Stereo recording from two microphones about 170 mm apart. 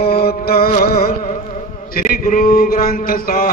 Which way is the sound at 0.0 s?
65° left (ahead or behind).